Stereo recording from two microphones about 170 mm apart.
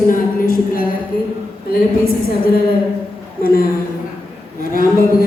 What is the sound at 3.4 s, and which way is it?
Speech, 60° left (ahead or behind).